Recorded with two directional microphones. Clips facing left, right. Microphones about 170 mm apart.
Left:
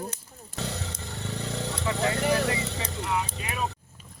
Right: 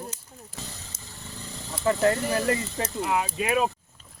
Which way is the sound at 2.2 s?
75° left (ahead or behind).